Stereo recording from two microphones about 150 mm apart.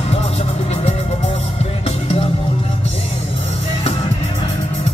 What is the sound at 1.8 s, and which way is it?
Music, 45° left (ahead or behind).